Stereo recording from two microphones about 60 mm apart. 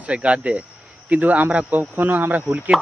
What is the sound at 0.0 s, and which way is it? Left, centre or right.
Speech, right.